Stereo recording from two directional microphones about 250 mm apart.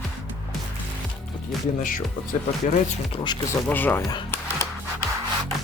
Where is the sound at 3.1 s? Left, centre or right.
Centre.